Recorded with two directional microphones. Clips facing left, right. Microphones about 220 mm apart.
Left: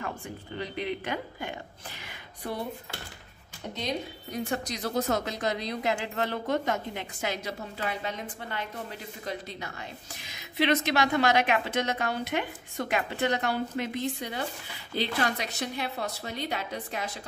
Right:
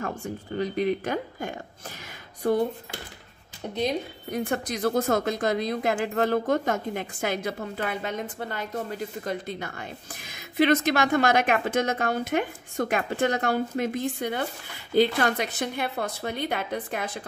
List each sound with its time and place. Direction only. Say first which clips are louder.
0.2 s a woman's voice: right 7 dB; 45° right (ahead or behind)
4.3 s a woman's voice: right 4 dB; 55° right (ahead or behind)